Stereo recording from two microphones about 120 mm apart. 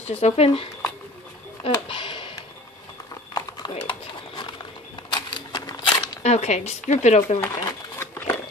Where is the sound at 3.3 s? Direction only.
35° left (ahead or behind).